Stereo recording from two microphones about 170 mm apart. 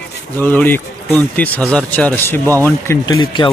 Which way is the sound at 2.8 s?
20° left (ahead or behind).